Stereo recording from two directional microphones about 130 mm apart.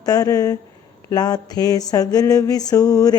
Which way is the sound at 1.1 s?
30° left (ahead or behind).